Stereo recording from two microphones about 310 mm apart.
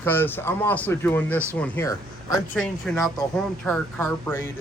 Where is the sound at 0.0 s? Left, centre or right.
Centre.